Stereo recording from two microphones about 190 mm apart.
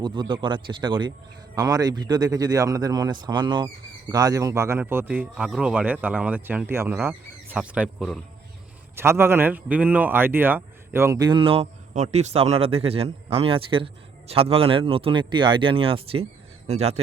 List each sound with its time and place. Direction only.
0.0 s speech: 25° right (ahead or behind); by 8.2 s centre (ahead or behind)
9.0 s a man's voice: 15° right (ahead or behind); by 17.0 s 35° right (ahead or behind)